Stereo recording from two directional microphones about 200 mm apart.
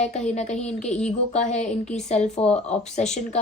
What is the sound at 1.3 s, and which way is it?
A woman's voice, 35° left (ahead or behind).